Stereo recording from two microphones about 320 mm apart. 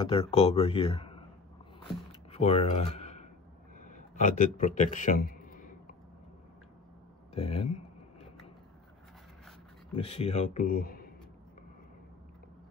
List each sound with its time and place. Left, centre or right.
0.0 s speech: centre
2.3 s speech: centre
3.8 s a sound: left
7.3 s a man's voice: centre
9.9 s a man's voice: centre